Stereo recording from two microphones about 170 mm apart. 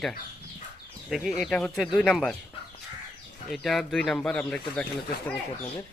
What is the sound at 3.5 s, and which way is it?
Speech, centre (ahead or behind).